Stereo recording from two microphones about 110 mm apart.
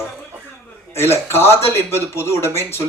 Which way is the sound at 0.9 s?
20° left (ahead or behind).